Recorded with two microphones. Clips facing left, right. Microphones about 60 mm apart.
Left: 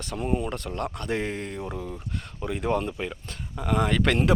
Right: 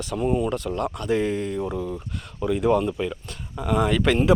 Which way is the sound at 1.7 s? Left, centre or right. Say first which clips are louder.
Right 6 dB; right.